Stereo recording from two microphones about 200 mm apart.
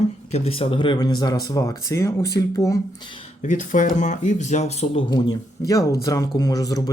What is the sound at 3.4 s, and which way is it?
Speech, 40° left (ahead or behind).